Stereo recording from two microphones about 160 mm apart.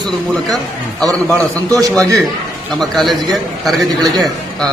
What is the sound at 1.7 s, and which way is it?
Speech, 20° right (ahead or behind).